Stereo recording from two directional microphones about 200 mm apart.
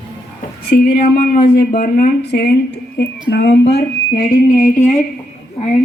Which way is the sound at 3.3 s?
60° left (ahead or behind).